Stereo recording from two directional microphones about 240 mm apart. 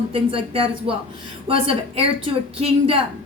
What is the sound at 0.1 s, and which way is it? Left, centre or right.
A woman's voice, right.